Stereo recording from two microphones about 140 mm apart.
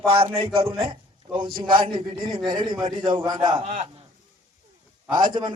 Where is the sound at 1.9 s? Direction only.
35° right (ahead or behind).